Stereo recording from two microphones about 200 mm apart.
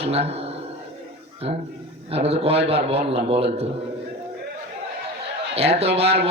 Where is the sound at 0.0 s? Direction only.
30° right (ahead or behind).